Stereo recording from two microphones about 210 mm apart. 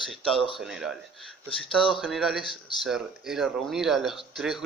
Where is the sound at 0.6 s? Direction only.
Centre (ahead or behind).